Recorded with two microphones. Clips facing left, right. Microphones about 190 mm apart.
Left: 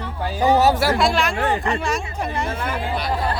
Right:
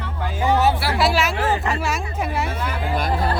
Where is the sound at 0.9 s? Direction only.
5° right (ahead or behind).